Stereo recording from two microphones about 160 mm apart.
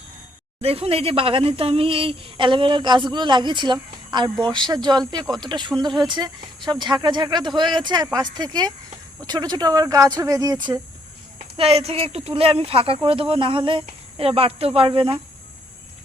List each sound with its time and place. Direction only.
0.6 s speech: 35° right (ahead or behind)
11.3 s speech: 40° right (ahead or behind)